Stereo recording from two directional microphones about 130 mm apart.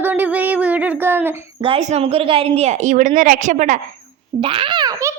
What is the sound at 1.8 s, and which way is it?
A woman's voice, 60° right (ahead or behind).